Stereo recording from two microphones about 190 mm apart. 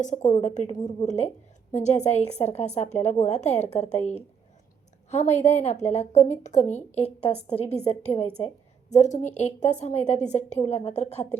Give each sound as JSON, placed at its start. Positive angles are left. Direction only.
{"t": 0.0, "sound": "a woman's voice", "side_deg": 40}
{"t": 5.1, "sound": "a woman's voice", "side_deg": 35}